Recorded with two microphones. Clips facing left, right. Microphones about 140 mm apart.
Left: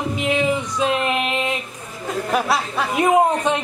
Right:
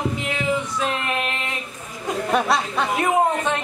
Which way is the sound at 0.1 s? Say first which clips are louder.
Left 4 dB; 20° left (ahead or behind).